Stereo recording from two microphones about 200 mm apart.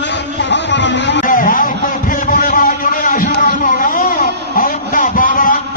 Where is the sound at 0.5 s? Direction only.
65° left (ahead or behind).